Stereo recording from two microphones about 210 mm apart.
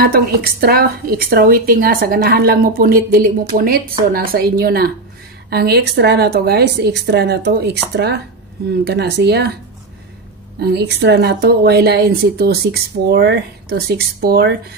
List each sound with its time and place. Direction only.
0.0 s a woman's voice: 50° right (ahead or behind)
10.6 s a woman's voice: 50° right (ahead or behind)